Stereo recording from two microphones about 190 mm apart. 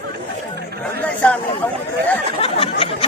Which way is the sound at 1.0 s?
5° left (ahead or behind).